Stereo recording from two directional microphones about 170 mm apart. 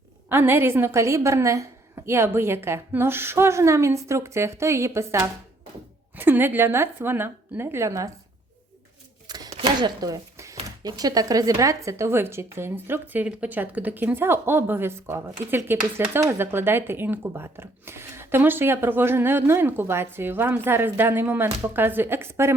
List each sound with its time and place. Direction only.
0.3 s speech: 15° right (ahead or behind)
9.2 s a sound: 25° right (ahead or behind)
9.5 s speech: 30° right (ahead or behind)